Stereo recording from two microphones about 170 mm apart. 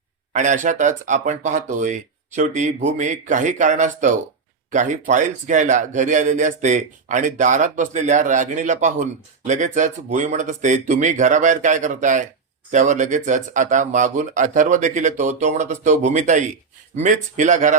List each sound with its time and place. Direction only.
0.3 s a man's voice: 50° right (ahead or behind)